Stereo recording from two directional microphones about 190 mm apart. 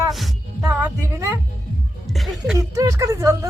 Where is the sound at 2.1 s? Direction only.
Centre (ahead or behind).